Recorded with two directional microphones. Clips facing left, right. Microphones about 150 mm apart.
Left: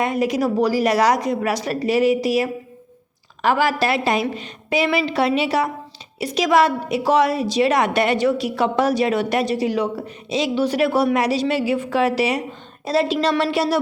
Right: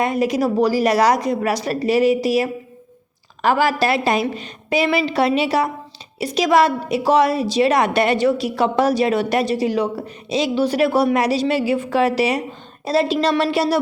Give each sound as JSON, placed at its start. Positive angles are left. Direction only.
{"t": 0.0, "sound": "a woman's voice", "side_deg": -35}